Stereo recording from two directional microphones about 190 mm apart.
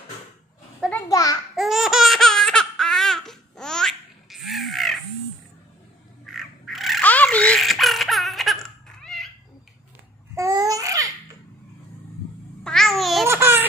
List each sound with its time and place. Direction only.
1.0 s a child's voice: 20° left (ahead or behind)
1.5 s laughter: centre (ahead or behind)
6.2 s crow: centre (ahead or behind)
10.3 s babbling: 15° right (ahead or behind)
12.6 s babbling: centre (ahead or behind)
13.3 s laughter: 10° right (ahead or behind)